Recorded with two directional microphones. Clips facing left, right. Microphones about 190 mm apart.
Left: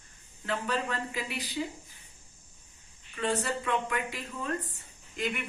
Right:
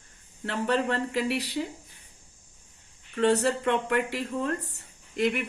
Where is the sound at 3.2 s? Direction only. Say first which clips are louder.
Right 8 dB; 70° right (ahead or behind).